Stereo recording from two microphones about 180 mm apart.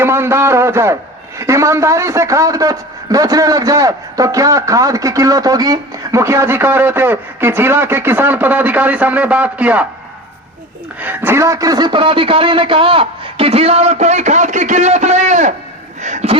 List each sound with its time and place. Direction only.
0.0 s a man's voice: 15° right (ahead or behind)
11.0 s a man's voice: 10° right (ahead or behind); by 15.5 s 40° right (ahead or behind)
16.0 s a sound: 40° right (ahead or behind)